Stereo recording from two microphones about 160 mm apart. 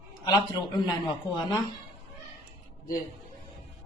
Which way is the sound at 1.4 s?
30° left (ahead or behind).